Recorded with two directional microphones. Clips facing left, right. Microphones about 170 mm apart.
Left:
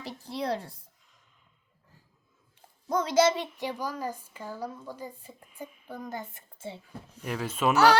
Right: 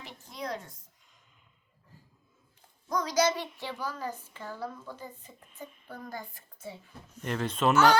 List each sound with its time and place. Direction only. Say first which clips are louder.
0.0 s a woman's voice: left 6 dB; 30° left (ahead or behind)
2.8 s a child's voice: left 4 dB; 25° left (ahead or behind); by 6.0 s 10° left (ahead or behind)
6.0 s speech: left 3 dB; 20° left (ahead or behind)
7.2 s speech: right 1 dB; 5° left (ahead or behind)